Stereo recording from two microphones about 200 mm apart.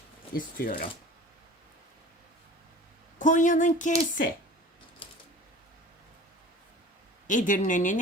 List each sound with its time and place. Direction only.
0.5 s speech: 45° left (ahead or behind)
3.2 s a woman's voice: 40° left (ahead or behind)
7.3 s a woman's voice: 40° left (ahead or behind)